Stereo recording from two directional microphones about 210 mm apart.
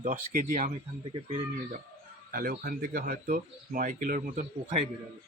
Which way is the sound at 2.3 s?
45° right (ahead or behind).